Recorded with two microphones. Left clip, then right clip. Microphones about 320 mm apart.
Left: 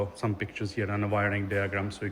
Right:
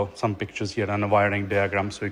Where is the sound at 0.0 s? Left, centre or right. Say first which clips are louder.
Right 5 dB; centre.